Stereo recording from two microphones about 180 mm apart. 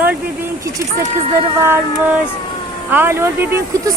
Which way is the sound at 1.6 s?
15° right (ahead or behind).